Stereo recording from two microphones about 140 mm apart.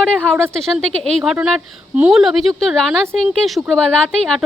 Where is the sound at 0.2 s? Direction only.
15° right (ahead or behind).